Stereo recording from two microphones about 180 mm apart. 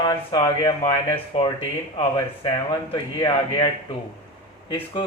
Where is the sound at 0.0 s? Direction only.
25° left (ahead or behind).